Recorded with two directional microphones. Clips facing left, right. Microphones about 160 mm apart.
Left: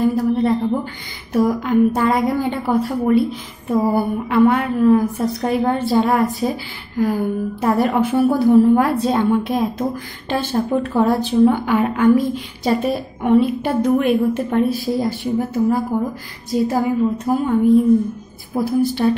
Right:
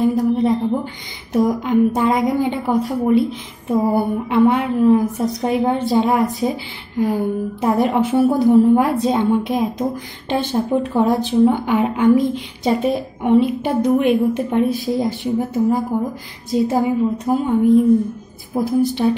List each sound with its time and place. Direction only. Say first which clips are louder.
0.0 s a sound: right 1 dB; 20° right (ahead or behind)
1.3 s a woman's voice: even; 20° right (ahead or behind)
18.6 s a woman's voice: even; 20° right (ahead or behind)